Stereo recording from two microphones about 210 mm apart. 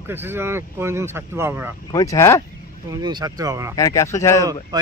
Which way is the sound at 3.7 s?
15° left (ahead or behind).